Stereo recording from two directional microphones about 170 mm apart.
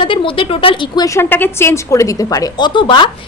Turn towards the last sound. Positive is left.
turn(degrees=30)  # may be behind; listen again after turning